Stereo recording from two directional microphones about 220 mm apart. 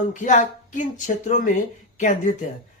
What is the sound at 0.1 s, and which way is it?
Speech, 35° left (ahead or behind).